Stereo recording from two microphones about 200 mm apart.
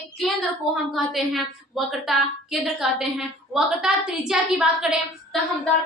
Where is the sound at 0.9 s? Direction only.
Centre (ahead or behind).